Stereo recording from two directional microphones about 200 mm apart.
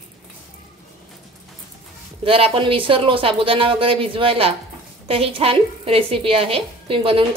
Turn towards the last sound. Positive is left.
turn(degrees=-25)  # may be behind; listen again after turning